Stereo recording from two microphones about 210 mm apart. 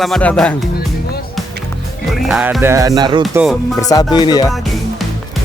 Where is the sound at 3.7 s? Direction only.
15° left (ahead or behind).